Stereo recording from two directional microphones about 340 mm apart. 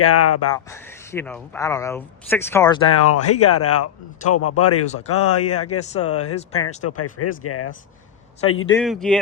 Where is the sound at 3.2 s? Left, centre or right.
Left.